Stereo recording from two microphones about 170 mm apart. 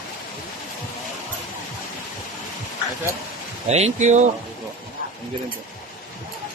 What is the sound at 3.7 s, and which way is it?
Speech, 40° right (ahead or behind).